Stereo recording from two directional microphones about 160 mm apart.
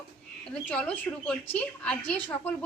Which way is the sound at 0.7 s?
5° left (ahead or behind).